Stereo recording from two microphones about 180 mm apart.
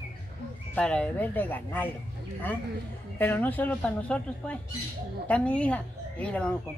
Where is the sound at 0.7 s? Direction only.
5° left (ahead or behind).